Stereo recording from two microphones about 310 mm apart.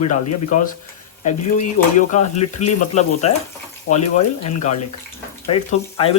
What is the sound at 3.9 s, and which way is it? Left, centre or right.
Speech, left.